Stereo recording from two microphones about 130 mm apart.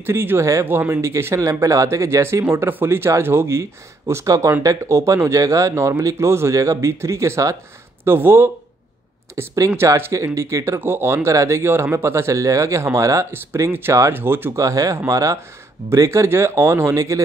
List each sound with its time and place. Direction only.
0.0 s speech: 15° right (ahead or behind)